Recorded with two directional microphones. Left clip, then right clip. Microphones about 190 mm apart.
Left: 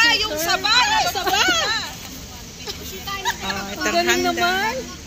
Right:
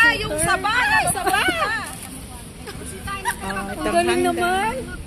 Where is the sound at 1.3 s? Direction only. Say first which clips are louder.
Left 3 dB; 60° left (ahead or behind).